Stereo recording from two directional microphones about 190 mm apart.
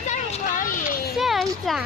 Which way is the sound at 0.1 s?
40° left (ahead or behind).